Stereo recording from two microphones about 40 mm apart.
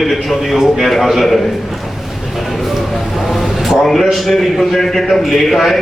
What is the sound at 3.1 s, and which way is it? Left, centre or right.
Vehicle, centre.